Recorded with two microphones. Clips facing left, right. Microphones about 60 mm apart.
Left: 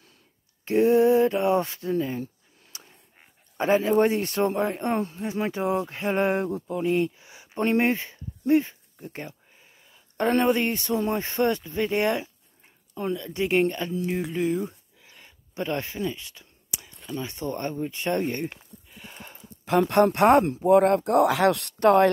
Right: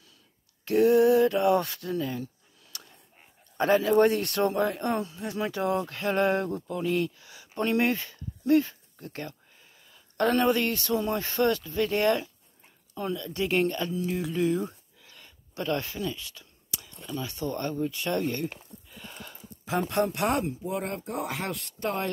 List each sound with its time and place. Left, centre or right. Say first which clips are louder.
0.7 s speech: left 1 dB; left
3.5 s speech: left 1 dB; left
4.9 s speech: left 4 dB; left
5.2 s speech: left 2 dB; left
9.0 s a sound: left 1 dB; centre
10.3 s speech: left 4 dB; left
15.0 s a sound: left 1 dB; centre
17.1 s speech: left 1 dB; left
19.8 s speech: left 8 dB; left